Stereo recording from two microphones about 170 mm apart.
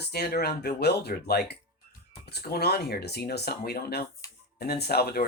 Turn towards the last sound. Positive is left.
turn(degrees=65)  # may be behind; listen again after turning